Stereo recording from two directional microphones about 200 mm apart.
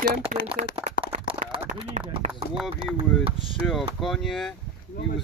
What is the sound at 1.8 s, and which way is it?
Speech, 30° right (ahead or behind).